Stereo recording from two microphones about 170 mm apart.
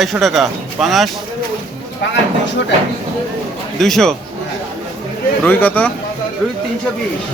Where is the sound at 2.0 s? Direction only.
90° left.